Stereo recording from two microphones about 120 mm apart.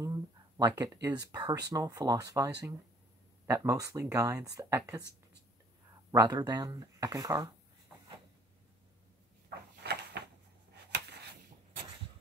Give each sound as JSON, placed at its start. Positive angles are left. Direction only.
{"t": 0.0, "sound": "speech", "side_deg": -30}
{"t": 6.1, "sound": "speech", "side_deg": -35}